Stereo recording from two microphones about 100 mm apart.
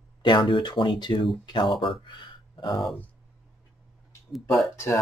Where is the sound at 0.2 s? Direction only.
50° left (ahead or behind).